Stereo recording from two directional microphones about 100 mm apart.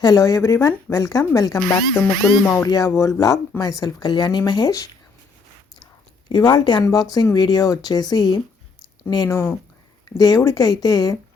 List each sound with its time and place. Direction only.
0.0 s speech: 35° left (ahead or behind)
6.2 s speech: 45° left (ahead or behind)
9.3 s speech: 25° left (ahead or behind)
10.2 s speech: 40° left (ahead or behind)